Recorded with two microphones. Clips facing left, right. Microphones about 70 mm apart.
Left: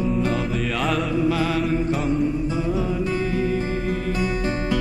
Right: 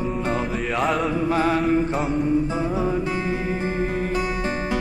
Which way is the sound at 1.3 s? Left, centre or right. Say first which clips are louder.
Right 4 dB; right.